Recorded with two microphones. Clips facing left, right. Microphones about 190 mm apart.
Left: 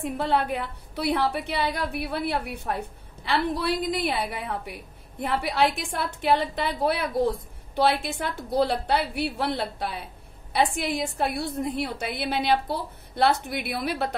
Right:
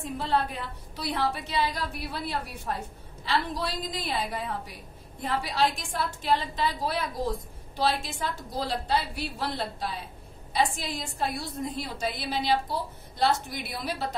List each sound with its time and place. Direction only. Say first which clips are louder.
0.0 s a woman's voice: left 3 dB; 60° left (ahead or behind)